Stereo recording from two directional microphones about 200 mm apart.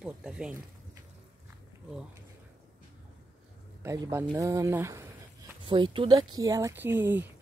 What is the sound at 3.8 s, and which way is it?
Speech, 15° right (ahead or behind).